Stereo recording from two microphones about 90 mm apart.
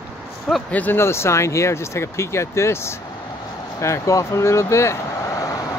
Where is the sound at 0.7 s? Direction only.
20° left (ahead or behind); by 5.6 s 35° left (ahead or behind).